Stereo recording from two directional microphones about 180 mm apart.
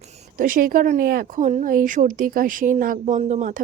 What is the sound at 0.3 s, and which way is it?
A woman's voice, 50° right (ahead or behind).